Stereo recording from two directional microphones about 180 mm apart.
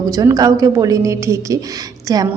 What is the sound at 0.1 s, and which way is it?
A woman's voice, 20° right (ahead or behind).